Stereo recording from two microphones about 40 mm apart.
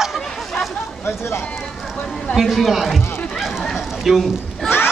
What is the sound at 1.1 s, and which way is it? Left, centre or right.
Speech, left.